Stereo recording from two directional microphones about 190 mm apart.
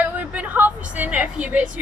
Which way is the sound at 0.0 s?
10° right (ahead or behind).